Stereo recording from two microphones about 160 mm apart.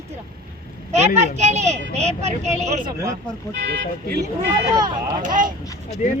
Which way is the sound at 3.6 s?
90° right.